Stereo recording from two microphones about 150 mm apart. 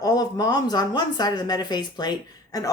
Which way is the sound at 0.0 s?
25° left (ahead or behind).